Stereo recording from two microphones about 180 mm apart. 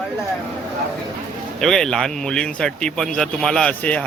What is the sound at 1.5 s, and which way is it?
Speech, 5° left (ahead or behind).